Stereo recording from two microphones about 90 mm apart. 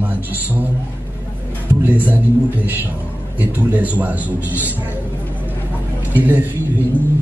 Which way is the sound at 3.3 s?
20° right (ahead or behind).